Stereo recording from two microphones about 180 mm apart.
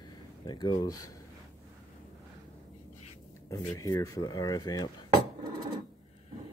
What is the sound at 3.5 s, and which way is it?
Speech, 20° left (ahead or behind).